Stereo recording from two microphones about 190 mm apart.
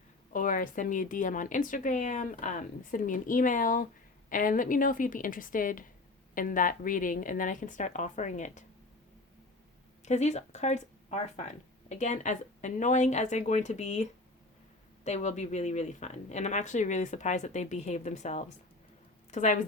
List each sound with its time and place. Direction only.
0.3 s speech: 45° left (ahead or behind)
10.1 s a woman's voice: 35° left (ahead or behind)